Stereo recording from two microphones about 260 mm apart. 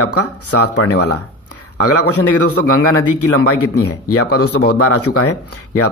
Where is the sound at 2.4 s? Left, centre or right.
Left.